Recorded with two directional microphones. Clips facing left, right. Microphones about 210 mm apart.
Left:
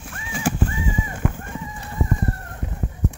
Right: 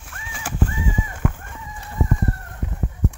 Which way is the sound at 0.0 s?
15° left (ahead or behind).